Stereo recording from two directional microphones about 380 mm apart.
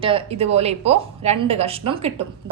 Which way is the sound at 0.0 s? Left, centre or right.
Centre.